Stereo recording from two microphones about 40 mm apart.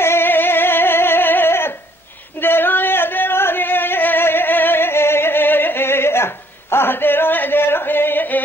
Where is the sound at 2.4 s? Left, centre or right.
Left.